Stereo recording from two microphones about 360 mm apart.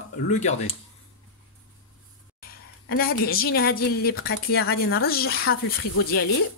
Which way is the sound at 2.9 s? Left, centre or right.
Left.